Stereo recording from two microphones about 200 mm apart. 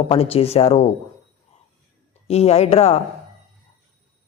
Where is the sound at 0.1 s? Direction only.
30° left (ahead or behind).